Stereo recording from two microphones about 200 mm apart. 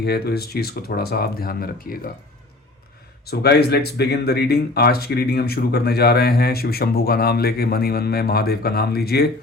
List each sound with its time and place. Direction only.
0.0 s speech: 55° left (ahead or behind)
3.2 s speech: 55° left (ahead or behind)